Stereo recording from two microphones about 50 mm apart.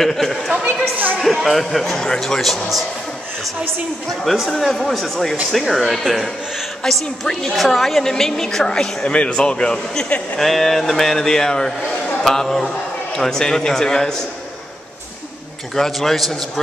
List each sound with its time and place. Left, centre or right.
0.0 s speech: centre
0.9 s speech: right
1.2 s speech: centre
4.1 s a woman's voice: centre
9.0 s a man's voice: left
10.4 s a woman's voice: centre
15.7 s a woman's voice: centre